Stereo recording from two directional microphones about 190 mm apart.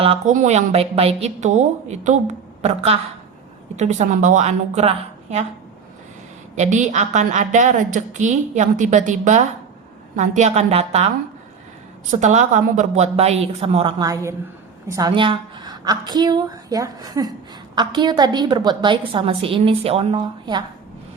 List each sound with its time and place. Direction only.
0.0 s a woman's voice: 35° right (ahead or behind)
6.6 s a woman's voice: 40° right (ahead or behind)
12.2 s a woman's voice: 40° right (ahead or behind)
14.0 s a woman's voice: 15° right (ahead or behind)